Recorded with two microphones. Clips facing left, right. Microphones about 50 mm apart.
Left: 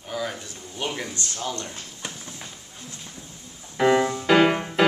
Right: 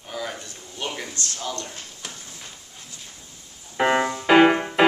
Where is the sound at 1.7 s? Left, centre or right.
Left.